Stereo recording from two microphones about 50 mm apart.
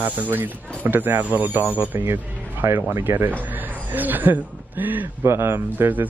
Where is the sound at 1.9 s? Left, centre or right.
Right.